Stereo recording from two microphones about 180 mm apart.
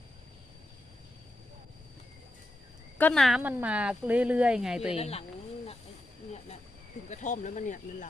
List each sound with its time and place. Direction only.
3.0 s speech: 5° left (ahead or behind)
4.9 s speech: 35° left (ahead or behind)
7.1 s speech: 40° left (ahead or behind)